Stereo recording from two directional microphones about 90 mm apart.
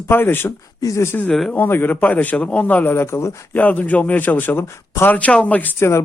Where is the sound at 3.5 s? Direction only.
15° left (ahead or behind).